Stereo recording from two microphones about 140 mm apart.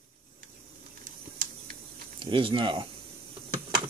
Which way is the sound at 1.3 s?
90° right.